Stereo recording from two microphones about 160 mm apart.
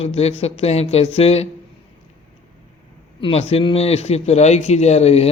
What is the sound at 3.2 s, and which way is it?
Speech, 40° left (ahead or behind).